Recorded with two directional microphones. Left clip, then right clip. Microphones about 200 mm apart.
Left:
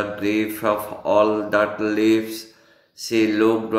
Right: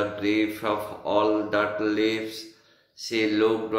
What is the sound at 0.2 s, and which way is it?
Speech, 55° left (ahead or behind).